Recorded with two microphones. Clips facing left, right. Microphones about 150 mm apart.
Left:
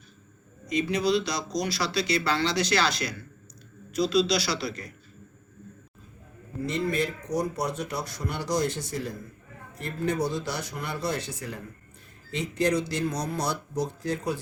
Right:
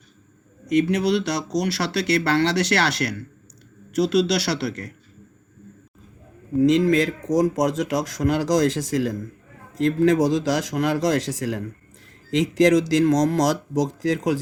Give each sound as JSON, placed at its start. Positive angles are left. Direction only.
{"t": 0.7, "sound": "speech", "side_deg": -65}
{"t": 6.6, "sound": "speech", "side_deg": -90}